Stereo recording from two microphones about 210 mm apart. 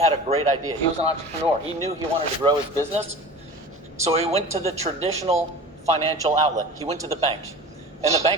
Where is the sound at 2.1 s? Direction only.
25° right (ahead or behind).